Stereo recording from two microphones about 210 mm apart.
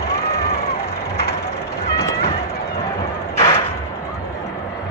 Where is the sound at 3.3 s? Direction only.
15° left (ahead or behind).